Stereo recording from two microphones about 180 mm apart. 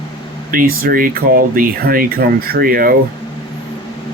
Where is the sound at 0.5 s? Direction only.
55° right (ahead or behind).